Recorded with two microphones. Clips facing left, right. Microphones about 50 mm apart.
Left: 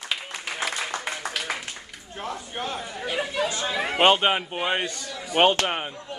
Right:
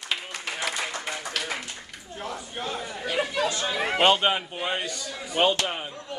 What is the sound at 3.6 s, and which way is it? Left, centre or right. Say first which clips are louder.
Speech: even; centre.